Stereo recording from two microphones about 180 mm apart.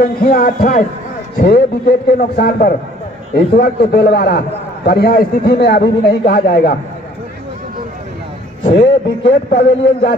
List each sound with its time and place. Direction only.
0.3 s a man's voice: 55° left (ahead or behind)
8.7 s a man's voice: 70° left (ahead or behind)